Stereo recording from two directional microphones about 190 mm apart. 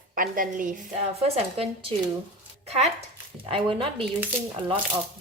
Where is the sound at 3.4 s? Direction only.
25° right (ahead or behind).